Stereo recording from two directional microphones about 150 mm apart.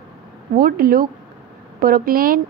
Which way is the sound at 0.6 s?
75° right (ahead or behind).